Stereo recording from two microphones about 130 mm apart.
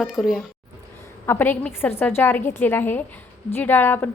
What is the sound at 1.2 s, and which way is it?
A woman's voice, 15° left (ahead or behind).